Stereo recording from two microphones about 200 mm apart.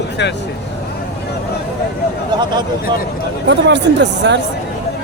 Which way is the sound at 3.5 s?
60° right (ahead or behind).